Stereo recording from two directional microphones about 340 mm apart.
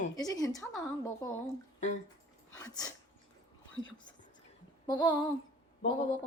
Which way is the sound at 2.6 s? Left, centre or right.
Centre.